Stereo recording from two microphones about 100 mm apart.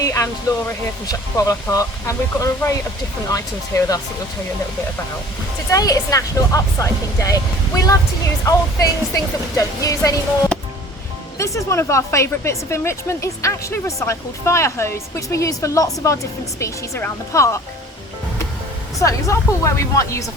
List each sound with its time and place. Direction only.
0.0 s a sound: 35° left (ahead or behind)
1.0 s speech: 35° left (ahead or behind)
5.7 s speech: 35° left (ahead or behind)
8.4 s speech: 35° left (ahead or behind)
18.9 s speech: 35° left (ahead or behind)